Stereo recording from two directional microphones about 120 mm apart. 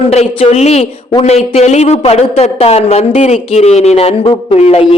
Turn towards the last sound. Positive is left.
turn(degrees=55)  # may be behind; listen again after turning